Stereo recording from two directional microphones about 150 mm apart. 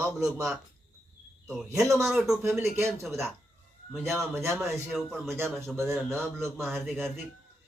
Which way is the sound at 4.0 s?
15° right (ahead or behind).